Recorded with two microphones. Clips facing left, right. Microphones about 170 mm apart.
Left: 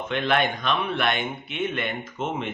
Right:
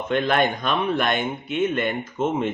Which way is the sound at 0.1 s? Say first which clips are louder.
Right 3 dB; 45° right (ahead or behind).